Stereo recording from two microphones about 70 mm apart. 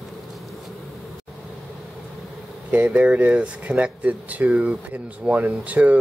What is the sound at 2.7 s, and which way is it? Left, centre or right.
Speech, centre.